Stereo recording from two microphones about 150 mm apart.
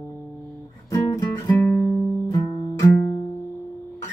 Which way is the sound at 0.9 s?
20° left (ahead or behind).